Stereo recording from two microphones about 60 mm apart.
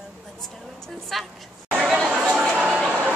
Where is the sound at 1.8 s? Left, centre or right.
Centre.